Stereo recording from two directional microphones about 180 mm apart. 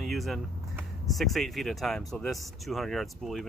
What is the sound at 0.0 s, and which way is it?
Vehicle, centre (ahead or behind).